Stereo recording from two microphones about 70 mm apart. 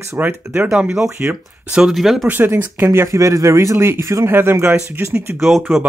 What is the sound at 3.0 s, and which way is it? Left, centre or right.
Speech, right.